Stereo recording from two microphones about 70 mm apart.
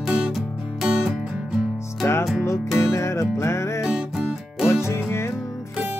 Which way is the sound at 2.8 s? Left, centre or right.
Left.